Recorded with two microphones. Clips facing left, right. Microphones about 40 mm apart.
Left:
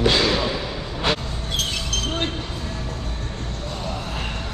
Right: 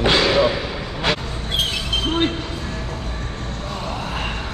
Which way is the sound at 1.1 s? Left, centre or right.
Centre.